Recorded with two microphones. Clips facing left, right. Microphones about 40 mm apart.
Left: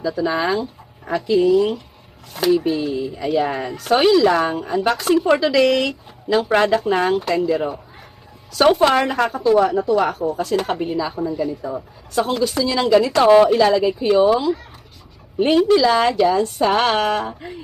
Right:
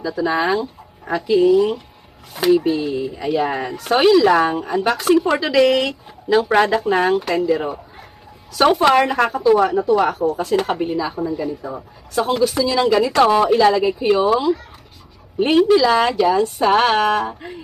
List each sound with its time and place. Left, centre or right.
0.0 s speech: centre
1.4 s speech: centre
2.4 s speech: centre
14.2 s speech: centre